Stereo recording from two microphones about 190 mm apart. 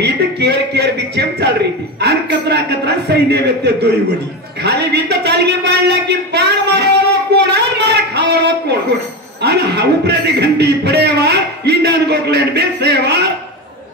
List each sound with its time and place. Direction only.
0.0 s a man's voice: 60° right (ahead or behind)
7.3 s a sound: 65° right (ahead or behind)
9.4 s a man's voice: 60° right (ahead or behind)